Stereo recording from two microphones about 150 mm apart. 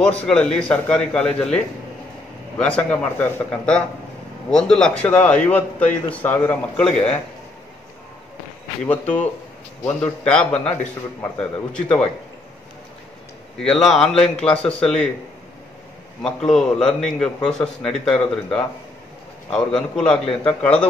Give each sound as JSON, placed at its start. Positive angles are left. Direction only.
{"t": 0.0, "sound": "a man's voice", "side_deg": 10}
{"t": 2.6, "sound": "a man's voice", "side_deg": 10}
{"t": 8.8, "sound": "a man's voice", "side_deg": 10}
{"t": 13.6, "sound": "a man's voice", "side_deg": 5}
{"t": 16.2, "sound": "a man's voice", "side_deg": 5}